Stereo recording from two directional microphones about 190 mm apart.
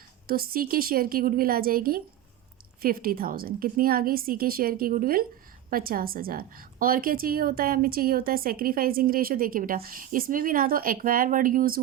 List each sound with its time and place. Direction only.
0.3 s a woman's voice: 50° right (ahead or behind)